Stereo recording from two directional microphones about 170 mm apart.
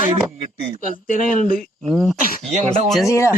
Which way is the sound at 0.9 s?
55° left (ahead or behind).